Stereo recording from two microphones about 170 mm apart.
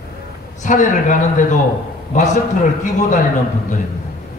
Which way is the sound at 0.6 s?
45° left (ahead or behind).